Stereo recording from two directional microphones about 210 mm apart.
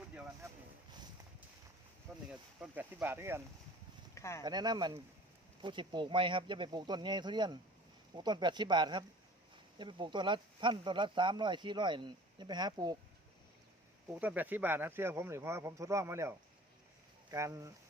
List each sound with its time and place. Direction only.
2.1 s a sound: centre (ahead or behind)
2.6 s speech: 10° right (ahead or behind)
4.1 s speech: 15° left (ahead or behind)
4.4 s speech: 20° right (ahead or behind)
14.1 s speech: 10° right (ahead or behind)
17.3 s speech: 15° right (ahead or behind)